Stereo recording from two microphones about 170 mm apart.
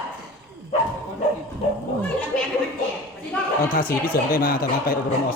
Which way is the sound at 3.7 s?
60° left (ahead or behind).